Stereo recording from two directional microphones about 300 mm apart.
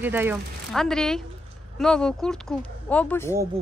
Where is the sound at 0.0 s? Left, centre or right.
Centre.